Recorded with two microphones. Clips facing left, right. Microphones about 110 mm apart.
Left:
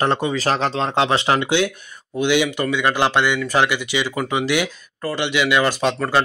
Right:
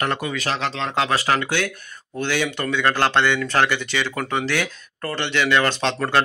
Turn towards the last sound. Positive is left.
turn(degrees=5)  # may be behind; listen again after turning